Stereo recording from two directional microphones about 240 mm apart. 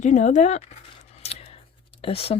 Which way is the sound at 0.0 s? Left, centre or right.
Left.